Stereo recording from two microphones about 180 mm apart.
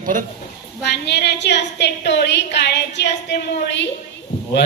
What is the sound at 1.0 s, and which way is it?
A woman's voice, 70° left (ahead or behind).